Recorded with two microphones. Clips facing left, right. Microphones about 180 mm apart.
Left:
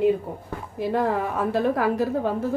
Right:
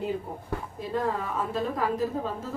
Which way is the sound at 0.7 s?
75° left (ahead or behind).